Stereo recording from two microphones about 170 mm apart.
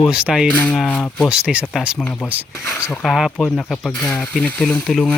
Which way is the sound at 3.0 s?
Centre (ahead or behind).